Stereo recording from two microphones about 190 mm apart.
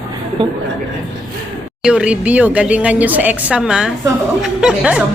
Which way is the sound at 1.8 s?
5° right (ahead or behind).